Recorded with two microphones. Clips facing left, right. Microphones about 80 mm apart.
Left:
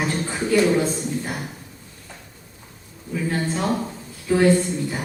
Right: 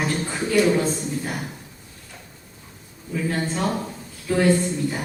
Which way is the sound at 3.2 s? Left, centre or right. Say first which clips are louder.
Even; centre.